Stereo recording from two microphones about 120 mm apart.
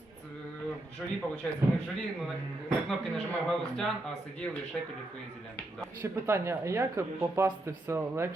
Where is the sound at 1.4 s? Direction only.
10° left (ahead or behind).